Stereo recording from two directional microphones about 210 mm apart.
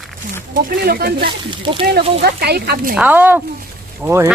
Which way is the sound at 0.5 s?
45° right (ahead or behind).